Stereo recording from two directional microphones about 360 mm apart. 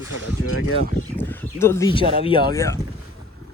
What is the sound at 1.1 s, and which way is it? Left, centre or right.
Speech, centre.